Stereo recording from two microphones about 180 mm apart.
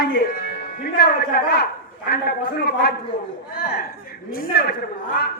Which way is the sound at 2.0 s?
60° left (ahead or behind).